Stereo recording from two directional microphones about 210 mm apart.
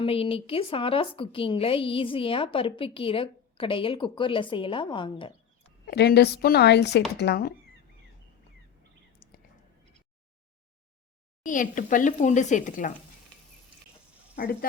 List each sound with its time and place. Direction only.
0.0 s a woman's voice: 25° left (ahead or behind)
5.8 s a woman's voice: 50° left (ahead or behind)
9.2 s whispering: 45° left (ahead or behind)
11.4 s speech: 40° left (ahead or behind)
14.3 s a woman's voice: 45° left (ahead or behind)